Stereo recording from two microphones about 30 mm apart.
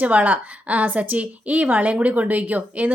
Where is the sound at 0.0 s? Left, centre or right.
Right.